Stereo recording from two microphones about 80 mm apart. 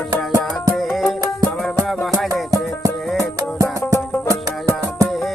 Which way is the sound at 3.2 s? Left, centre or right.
Right.